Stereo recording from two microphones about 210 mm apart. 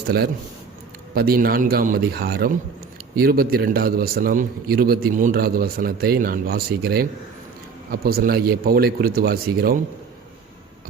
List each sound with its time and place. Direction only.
1.1 s a man's voice: 45° right (ahead or behind)